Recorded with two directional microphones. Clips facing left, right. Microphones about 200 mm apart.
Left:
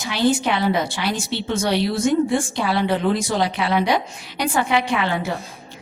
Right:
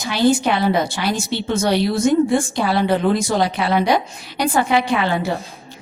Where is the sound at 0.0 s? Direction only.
40° right (ahead or behind).